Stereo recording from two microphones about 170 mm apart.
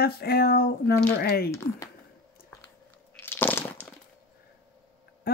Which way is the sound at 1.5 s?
15° left (ahead or behind).